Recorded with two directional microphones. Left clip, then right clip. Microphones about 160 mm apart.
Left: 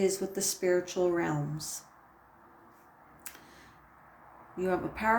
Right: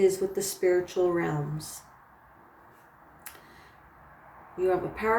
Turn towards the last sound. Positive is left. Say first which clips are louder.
# right 3 dB
turn(degrees=60)  # may be behind; listen again after turning